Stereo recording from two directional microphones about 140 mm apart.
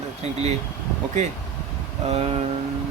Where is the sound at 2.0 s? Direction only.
50° right (ahead or behind).